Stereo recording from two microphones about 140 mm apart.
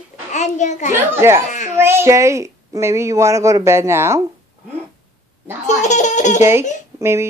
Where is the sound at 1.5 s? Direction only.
60° left (ahead or behind).